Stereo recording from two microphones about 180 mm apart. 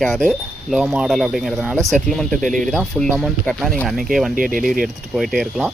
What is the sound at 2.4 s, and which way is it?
Speech, 45° right (ahead or behind).